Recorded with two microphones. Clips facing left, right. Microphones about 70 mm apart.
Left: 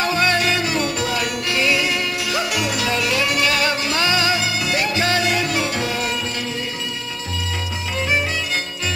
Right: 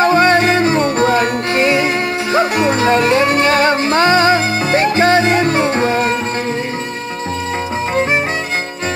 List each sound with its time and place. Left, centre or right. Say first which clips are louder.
0.0 s music: right 8 dB; right
7.9 s music: right 6 dB; right